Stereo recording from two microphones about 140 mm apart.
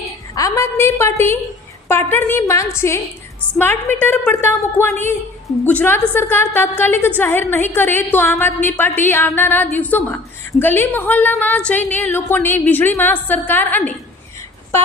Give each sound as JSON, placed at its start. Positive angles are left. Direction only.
{"t": 0.3, "sound": "a woman's voice", "side_deg": 25}